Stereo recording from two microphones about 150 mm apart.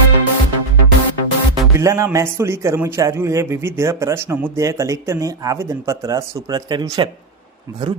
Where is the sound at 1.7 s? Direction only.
20° right (ahead or behind).